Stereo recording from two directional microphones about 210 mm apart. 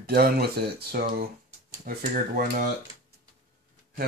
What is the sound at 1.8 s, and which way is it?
Dishes, 40° right (ahead or behind).